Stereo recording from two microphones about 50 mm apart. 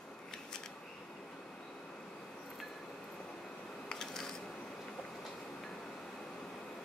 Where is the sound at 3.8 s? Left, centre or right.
Centre.